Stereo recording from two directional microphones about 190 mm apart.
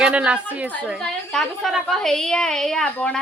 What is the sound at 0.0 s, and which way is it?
A woman's voice, 5° right (ahead or behind).